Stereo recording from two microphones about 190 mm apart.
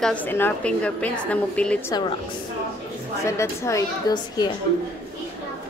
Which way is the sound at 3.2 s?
15° left (ahead or behind).